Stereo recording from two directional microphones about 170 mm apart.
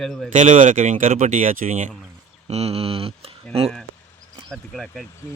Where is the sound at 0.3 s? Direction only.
45° right (ahead or behind).